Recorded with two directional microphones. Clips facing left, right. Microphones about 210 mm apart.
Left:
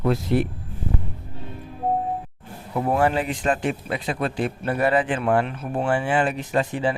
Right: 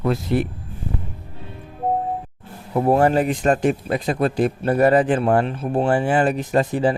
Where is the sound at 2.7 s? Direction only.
35° right (ahead or behind).